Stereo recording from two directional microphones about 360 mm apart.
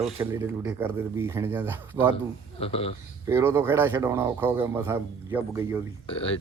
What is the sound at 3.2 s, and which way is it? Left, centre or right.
Speech, centre.